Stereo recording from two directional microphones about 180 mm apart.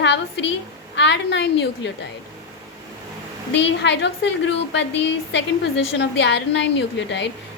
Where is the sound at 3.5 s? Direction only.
80° left.